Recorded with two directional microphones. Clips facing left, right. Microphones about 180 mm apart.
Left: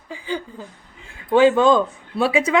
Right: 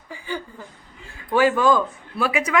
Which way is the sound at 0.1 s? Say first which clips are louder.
Left 3 dB; 15° left (ahead or behind).